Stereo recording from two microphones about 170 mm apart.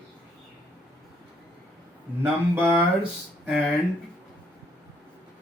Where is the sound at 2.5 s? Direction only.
10° right (ahead or behind).